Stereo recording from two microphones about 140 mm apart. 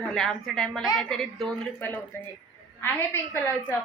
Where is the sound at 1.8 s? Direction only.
15° left (ahead or behind).